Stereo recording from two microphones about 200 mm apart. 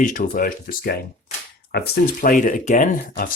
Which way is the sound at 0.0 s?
40° left (ahead or behind).